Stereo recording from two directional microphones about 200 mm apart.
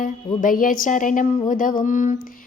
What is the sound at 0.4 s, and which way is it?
Speech, 40° left (ahead or behind).